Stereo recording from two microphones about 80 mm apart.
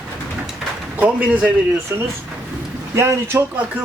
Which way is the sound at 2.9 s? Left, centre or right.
Right.